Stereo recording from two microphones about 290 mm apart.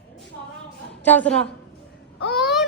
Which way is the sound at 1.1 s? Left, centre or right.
Centre.